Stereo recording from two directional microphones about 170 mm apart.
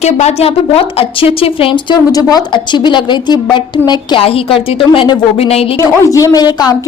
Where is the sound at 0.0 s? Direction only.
40° left (ahead or behind).